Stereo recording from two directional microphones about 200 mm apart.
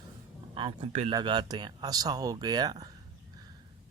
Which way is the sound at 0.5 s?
25° right (ahead or behind).